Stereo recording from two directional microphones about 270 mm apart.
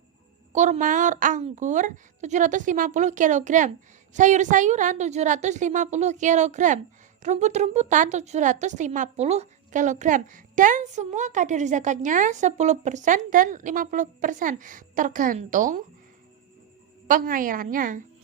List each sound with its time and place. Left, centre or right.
0.5 s a woman's voice: right
17.1 s a woman's voice: right